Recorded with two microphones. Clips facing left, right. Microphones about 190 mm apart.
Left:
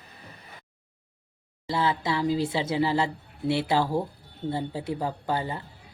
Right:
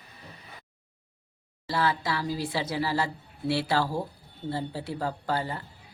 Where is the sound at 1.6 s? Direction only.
20° left (ahead or behind).